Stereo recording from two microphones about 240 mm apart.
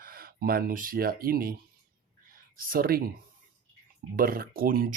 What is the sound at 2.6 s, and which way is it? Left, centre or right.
Speech, right.